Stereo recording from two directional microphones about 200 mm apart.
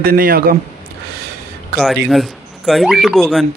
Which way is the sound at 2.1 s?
Centre (ahead or behind).